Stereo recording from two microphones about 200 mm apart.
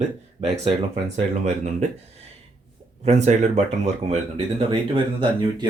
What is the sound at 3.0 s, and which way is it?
Speech, 35° right (ahead or behind).